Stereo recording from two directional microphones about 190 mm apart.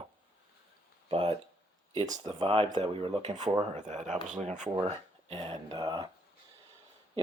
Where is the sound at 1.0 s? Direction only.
30° right (ahead or behind).